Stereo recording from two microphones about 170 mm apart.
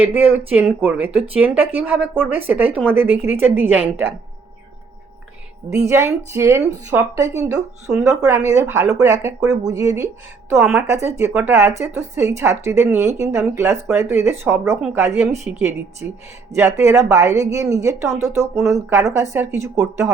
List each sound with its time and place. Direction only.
0.0 s a woman's voice: 10° right (ahead or behind)
5.9 s a woman's voice: 15° right (ahead or behind)
11.3 s a woman's voice: 15° right (ahead or behind)